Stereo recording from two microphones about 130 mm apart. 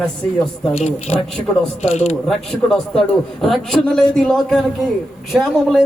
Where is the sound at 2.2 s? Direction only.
5° left (ahead or behind).